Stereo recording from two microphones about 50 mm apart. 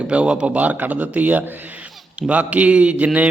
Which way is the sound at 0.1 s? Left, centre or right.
Right.